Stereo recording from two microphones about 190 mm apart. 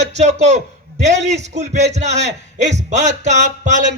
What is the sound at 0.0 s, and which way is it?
A man's voice, 35° right (ahead or behind).